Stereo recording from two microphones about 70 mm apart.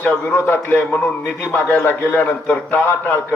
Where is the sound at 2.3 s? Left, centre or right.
Left.